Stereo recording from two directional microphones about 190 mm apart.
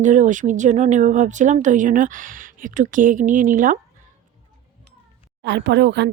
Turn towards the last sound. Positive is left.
turn(degrees=-60)  # may be behind; listen again after turning